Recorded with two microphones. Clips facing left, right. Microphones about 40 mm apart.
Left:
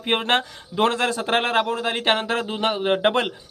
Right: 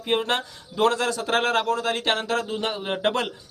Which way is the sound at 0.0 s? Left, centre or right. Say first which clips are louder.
Left 3 dB; left.